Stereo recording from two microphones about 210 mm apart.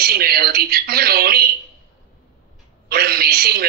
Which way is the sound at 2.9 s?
45° right (ahead or behind).